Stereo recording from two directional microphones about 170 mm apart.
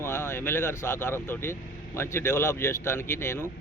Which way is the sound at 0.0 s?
15° left (ahead or behind).